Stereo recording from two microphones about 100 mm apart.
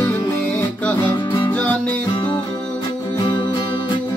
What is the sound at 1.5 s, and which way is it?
Music, 15° left (ahead or behind).